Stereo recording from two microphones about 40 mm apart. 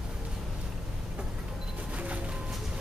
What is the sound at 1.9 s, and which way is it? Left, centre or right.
Music, right.